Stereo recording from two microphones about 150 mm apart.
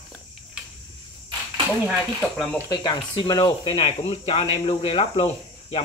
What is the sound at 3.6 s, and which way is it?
Speech, 40° left (ahead or behind).